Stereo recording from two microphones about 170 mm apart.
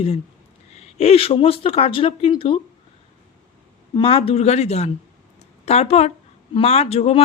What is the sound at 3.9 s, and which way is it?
Speech, 35° left (ahead or behind).